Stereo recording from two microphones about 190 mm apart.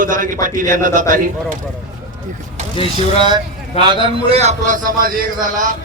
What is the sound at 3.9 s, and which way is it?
A man's voice, 25° right (ahead or behind).